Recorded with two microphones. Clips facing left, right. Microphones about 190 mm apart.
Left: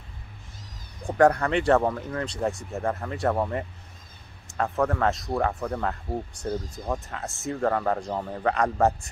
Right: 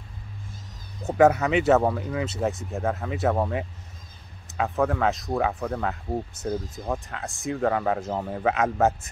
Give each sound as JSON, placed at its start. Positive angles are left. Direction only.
{"t": 1.1, "sound": "speech", "side_deg": -5}